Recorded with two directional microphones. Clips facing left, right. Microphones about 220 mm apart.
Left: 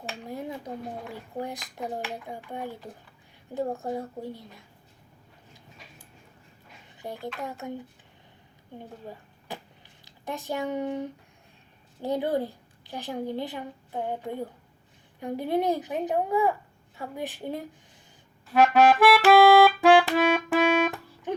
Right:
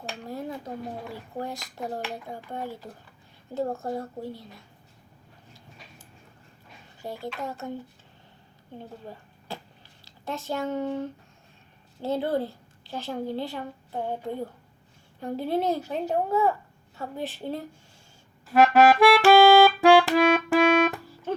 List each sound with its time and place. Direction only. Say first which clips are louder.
0.3 s a sound: right 1 dB; 20° left (ahead or behind)
1.1 s a woman's voice: even; 15° left (ahead or behind)
1.5 s a child's voice: even; centre (ahead or behind)
2.5 s a woman's voice: right 1 dB; 15° left (ahead or behind)
7.2 s a child's voice: right 1 dB; centre (ahead or behind)
7.4 s a woman's voice: right 1 dB; 15° left (ahead or behind)
9.5 s a sound: right 1 dB; 15° left (ahead or behind)
10.0 s a woman's voice: right 1 dB; 15° left (ahead or behind)
18.4 s music: right 1 dB; centre (ahead or behind)